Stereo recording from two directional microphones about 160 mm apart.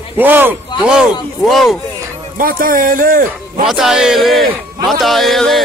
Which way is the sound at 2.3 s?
60° right (ahead or behind).